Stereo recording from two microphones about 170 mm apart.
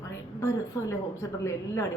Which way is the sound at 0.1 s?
15° left (ahead or behind).